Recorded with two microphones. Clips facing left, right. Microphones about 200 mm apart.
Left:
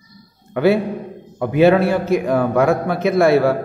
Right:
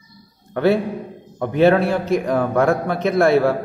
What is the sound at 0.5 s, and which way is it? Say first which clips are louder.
A man's voice: left 2 dB; 5° left (ahead or behind).